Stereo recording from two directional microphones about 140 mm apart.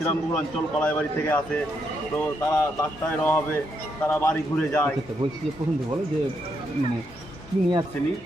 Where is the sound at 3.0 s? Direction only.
10° left (ahead or behind).